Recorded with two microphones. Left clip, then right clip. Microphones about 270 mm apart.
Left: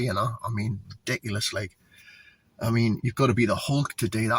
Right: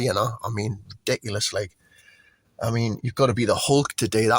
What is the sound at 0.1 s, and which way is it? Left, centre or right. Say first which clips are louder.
Speech: right 4 dB; right.